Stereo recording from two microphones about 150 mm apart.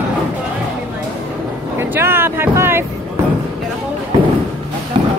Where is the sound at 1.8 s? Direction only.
15° right (ahead or behind).